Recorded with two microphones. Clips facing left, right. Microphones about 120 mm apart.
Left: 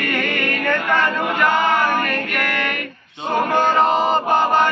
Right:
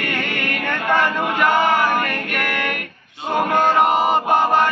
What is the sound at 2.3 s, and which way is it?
Music, 10° right (ahead or behind).